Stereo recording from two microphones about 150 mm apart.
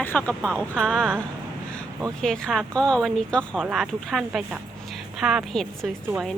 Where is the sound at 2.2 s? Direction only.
5° left (ahead or behind).